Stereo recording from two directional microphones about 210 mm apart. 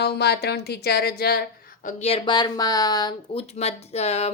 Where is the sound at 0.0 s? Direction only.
50° left (ahead or behind).